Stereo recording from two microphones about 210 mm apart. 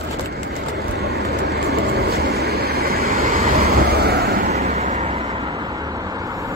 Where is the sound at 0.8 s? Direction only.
50° right (ahead or behind).